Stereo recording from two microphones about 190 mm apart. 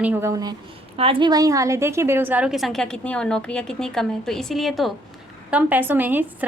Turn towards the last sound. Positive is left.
turn(degrees=-10)  # may be behind; listen again after turning